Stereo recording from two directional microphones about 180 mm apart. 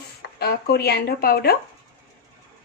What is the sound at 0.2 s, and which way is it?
Chopping, 60° left (ahead or behind).